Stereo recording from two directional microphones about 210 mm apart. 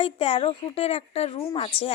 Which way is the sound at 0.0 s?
25° left (ahead or behind).